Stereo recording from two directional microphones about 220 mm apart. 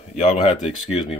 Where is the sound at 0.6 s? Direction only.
Centre (ahead or behind).